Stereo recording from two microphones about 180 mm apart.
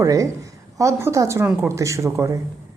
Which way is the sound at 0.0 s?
20° right (ahead or behind).